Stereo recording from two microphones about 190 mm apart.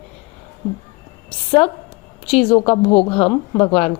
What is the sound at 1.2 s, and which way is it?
A woman's voice, 30° left (ahead or behind).